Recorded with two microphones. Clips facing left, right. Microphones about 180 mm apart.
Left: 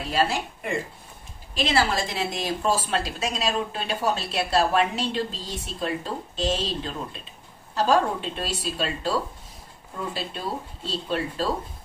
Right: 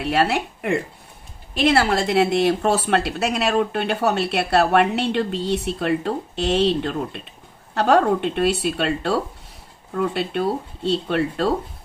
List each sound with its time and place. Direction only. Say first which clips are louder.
0.0 s speech: right 5 dB; 65° right (ahead or behind)